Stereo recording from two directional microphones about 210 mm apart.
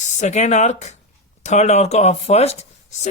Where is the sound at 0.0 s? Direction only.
35° left (ahead or behind).